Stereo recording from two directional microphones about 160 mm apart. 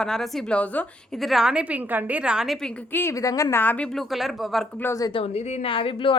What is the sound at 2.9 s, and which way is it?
A woman's voice, 15° left (ahead or behind).